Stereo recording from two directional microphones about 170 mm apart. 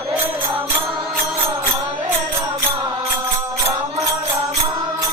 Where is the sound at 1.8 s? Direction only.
15° right (ahead or behind).